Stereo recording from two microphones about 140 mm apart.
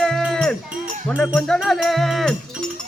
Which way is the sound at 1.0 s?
5° left (ahead or behind).